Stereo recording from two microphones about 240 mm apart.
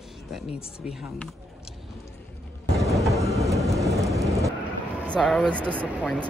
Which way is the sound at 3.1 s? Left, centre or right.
Centre.